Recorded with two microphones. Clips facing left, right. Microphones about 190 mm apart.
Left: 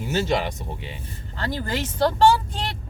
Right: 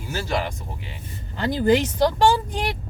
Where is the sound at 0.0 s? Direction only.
20° left (ahead or behind).